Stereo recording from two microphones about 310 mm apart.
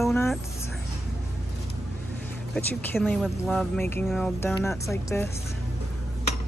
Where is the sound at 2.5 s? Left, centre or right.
Centre.